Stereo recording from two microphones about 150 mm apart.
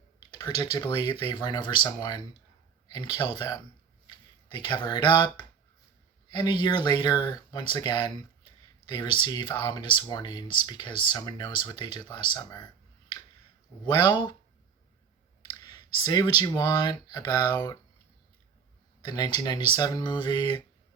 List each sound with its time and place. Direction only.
0.6 s speech: 30° left (ahead or behind)
9.2 s speech: 30° left (ahead or behind)
13.9 s speech: 30° left (ahead or behind)
15.4 s speech: 30° left (ahead or behind)
19.0 s speech: 30° left (ahead or behind)